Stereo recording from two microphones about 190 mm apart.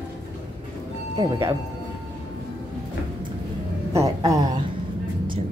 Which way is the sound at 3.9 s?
15° right (ahead or behind).